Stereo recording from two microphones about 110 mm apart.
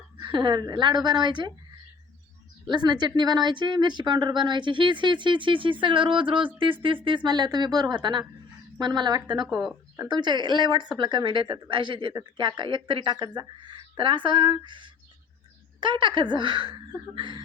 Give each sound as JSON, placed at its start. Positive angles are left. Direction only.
{"t": 0.2, "sound": "speech", "side_deg": -45}
{"t": 2.6, "sound": "speech", "side_deg": -40}
{"t": 9.5, "sound": "speech", "side_deg": -5}
{"t": 10.1, "sound": "speech", "side_deg": -45}